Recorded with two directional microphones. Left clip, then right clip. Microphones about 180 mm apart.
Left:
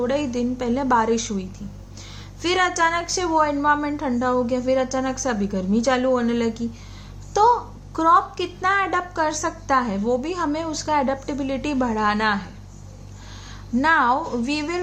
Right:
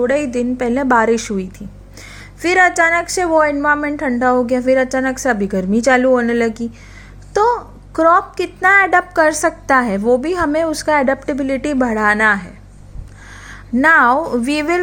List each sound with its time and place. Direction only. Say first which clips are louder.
0.0 s a woman's voice: right 7 dB; 40° right (ahead or behind)
13.5 s a woman's voice: right 7 dB; 40° right (ahead or behind)